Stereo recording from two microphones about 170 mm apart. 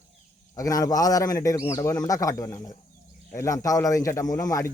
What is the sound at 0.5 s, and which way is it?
Speech, 20° left (ahead or behind).